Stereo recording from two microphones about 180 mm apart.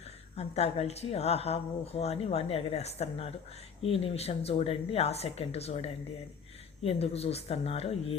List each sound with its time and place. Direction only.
0.3 s a woman's voice: 35° left (ahead or behind)